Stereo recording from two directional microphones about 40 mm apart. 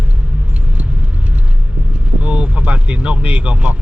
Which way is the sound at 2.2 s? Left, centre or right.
Right.